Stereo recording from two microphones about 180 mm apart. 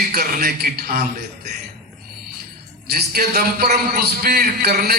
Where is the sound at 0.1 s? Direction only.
55° right (ahead or behind).